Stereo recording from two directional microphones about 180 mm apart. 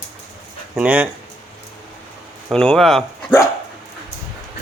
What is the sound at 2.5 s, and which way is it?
Speech, 5° left (ahead or behind).